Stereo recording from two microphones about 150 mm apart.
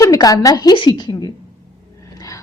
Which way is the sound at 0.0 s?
25° left (ahead or behind).